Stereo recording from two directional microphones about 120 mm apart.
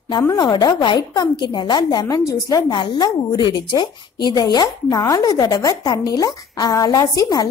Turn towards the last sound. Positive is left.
turn(degrees=30)  # may be behind; listen again after turning